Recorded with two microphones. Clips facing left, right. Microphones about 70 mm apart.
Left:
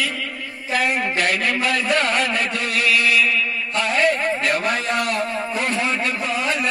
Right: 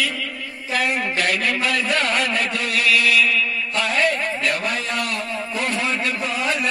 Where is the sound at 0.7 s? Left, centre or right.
Centre.